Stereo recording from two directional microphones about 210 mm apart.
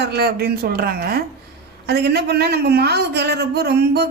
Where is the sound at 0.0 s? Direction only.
50° right (ahead or behind).